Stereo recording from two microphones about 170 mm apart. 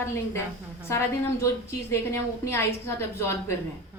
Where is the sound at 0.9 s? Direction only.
15° left (ahead or behind).